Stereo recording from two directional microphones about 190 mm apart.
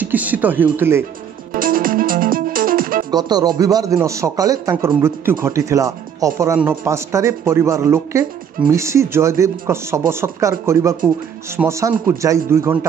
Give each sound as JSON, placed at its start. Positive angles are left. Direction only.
{"t": 0.0, "sound": "speech", "side_deg": -10}
{"t": 1.5, "sound": "music", "side_deg": -50}
{"t": 3.1, "sound": "speech", "side_deg": -20}